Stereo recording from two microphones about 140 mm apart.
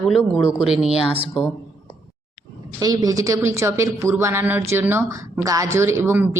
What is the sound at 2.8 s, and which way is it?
Speech, 25° right (ahead or behind).